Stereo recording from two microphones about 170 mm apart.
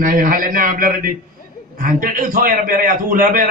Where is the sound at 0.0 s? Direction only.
55° right (ahead or behind).